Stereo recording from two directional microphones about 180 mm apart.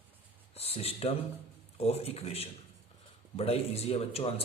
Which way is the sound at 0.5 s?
35° left (ahead or behind).